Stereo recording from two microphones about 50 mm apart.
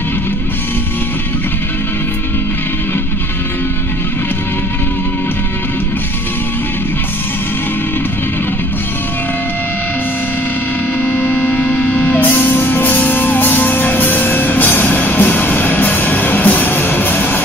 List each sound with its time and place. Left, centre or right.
11.5 s music: centre
11.8 s music: left